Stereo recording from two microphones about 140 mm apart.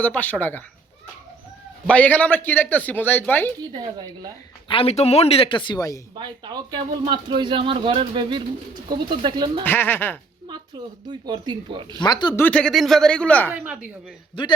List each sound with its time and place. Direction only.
0.0 s speech: 10° left (ahead or behind)
1.9 s speech: 10° left (ahead or behind)
3.6 s speech: 30° right (ahead or behind)
4.7 s speech: 45° left (ahead or behind); by 6.0 s 25° left (ahead or behind)
6.1 s speech: 35° right (ahead or behind)
9.6 s speech: 15° left (ahead or behind)
11.1 s speech: 30° right (ahead or behind)
11.9 s speech: 30° left (ahead or behind)
12.4 s speech: 10° left (ahead or behind)
13.5 s a woman's voice: 5° right (ahead or behind)